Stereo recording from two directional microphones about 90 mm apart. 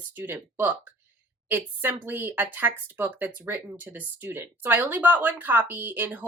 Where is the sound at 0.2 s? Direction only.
20° right (ahead or behind).